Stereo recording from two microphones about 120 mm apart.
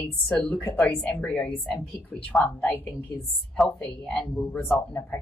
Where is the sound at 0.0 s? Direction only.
10° left (ahead or behind).